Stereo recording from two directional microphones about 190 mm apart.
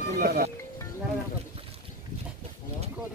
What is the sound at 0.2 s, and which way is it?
Speech, 50° right (ahead or behind).